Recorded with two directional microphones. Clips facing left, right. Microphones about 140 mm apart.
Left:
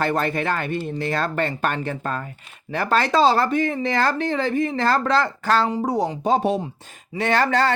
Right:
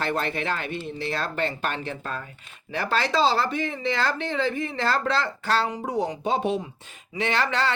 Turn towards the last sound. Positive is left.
turn(degrees=45)  # may be behind; listen again after turning